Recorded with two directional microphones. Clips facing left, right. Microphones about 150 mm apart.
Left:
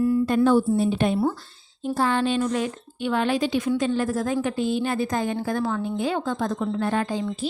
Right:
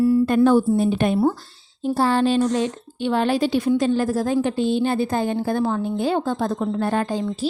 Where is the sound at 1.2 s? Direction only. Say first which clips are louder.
Right 4 dB; 35° right (ahead or behind).